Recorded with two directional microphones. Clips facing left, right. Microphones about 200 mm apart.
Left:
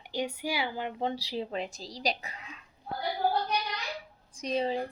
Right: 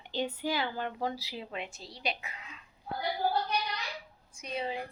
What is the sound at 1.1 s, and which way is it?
Speech, 30° left (ahead or behind).